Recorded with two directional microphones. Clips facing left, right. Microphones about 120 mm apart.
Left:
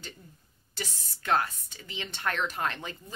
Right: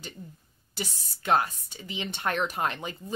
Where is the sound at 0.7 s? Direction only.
15° right (ahead or behind).